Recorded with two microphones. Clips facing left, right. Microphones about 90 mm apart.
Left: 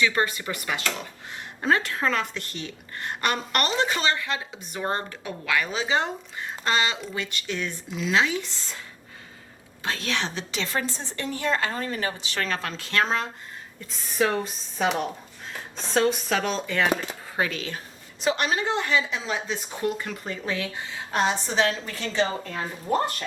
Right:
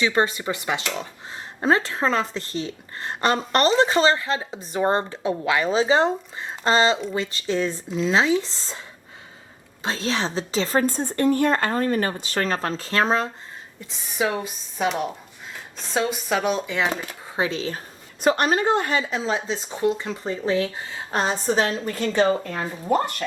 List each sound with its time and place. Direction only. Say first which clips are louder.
0.0 s a woman's voice: right 3 dB; 25° right (ahead or behind)
9.8 s a woman's voice: right 4 dB; 25° right (ahead or behind)
13.9 s speech: even; 15° right (ahead or behind)
15.9 s speech: left 1 dB; 15° right (ahead or behind); by 17.7 s 30° right (ahead or behind)
18.2 s a woman's voice: right 5 dB; 45° right (ahead or behind)
19.2 s a woman's voice: right 4 dB; 30° right (ahead or behind); by 22.6 s 45° right (ahead or behind)